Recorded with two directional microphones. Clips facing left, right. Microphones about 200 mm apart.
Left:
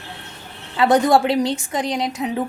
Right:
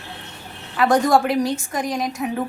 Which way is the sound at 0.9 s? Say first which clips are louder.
Left 2 dB; 20° left (ahead or behind).